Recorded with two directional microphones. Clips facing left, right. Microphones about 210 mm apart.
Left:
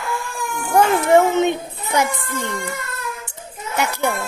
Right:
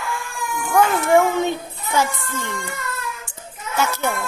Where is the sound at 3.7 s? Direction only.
15° left (ahead or behind).